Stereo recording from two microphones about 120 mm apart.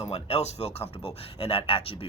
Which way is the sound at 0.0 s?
60° left (ahead or behind).